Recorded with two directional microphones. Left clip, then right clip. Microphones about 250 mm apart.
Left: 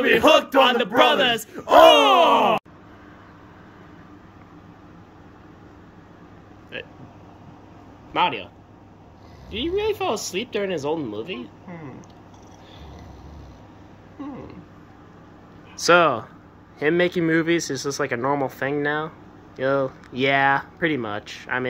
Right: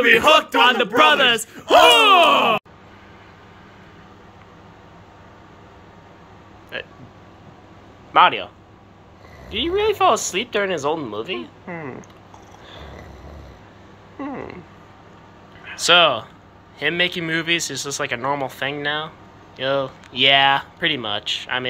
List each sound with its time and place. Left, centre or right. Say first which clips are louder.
0.7 s a sound: right 3 dB; centre
1.7 s speech: even; left
2.0 s a sound: right 3 dB; centre
6.7 s speech: right 4 dB; centre
8.1 s speech: right 8 dB; centre
9.5 s speech: right 4 dB; centre
15.8 s speech: right 2 dB; left